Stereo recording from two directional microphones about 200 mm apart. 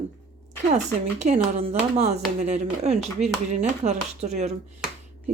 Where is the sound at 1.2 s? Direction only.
35° right (ahead or behind).